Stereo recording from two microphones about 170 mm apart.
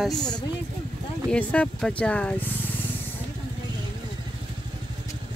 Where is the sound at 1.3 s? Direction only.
5° left (ahead or behind).